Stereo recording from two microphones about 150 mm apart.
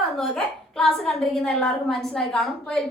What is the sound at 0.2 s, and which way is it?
A woman's voice, centre (ahead or behind).